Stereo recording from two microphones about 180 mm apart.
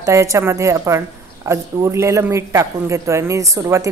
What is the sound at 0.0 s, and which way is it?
Speech, 15° right (ahead or behind).